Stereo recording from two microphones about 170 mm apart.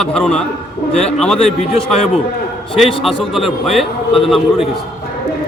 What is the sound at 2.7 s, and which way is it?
A man's voice, centre (ahead or behind).